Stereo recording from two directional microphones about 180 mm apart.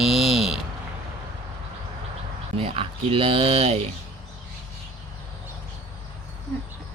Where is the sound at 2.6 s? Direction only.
30° right (ahead or behind).